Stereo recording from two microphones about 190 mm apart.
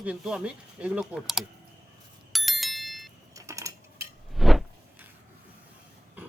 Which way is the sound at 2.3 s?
Centre (ahead or behind).